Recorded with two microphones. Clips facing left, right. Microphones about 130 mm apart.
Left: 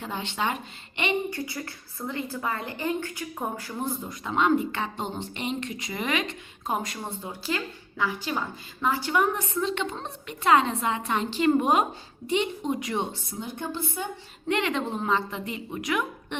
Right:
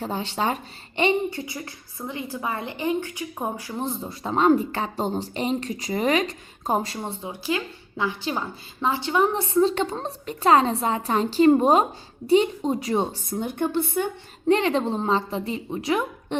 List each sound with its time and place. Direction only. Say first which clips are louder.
0.0 s speech: right 4 dB; 35° right (ahead or behind)
13.3 s speech: right 12 dB; 55° right (ahead or behind)
14.4 s speech: right 6 dB; 35° right (ahead or behind)